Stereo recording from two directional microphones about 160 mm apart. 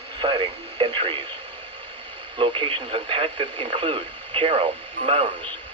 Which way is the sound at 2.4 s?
35° right (ahead or behind).